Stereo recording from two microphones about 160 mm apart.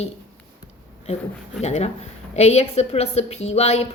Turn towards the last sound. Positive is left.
turn(degrees=40)  # may be behind; listen again after turning